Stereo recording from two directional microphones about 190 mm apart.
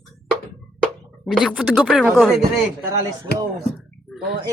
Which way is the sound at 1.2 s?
Centre (ahead or behind).